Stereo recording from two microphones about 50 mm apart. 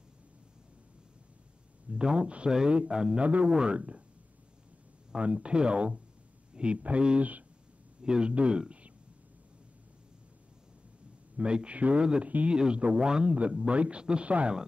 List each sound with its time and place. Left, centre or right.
1.9 s speech: centre
3.3 s speech: right
5.1 s speech: right
11.3 s speech: right